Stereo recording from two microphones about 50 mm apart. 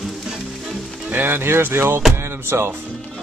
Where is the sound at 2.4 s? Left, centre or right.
Right.